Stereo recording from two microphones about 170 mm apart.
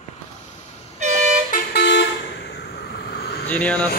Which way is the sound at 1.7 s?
90° left.